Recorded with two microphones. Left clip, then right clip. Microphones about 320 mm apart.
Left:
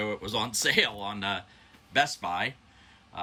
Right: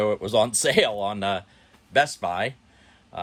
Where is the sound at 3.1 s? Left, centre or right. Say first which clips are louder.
Right 4 dB; centre.